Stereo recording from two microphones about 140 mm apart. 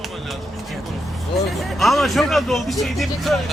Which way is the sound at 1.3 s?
Centre (ahead or behind).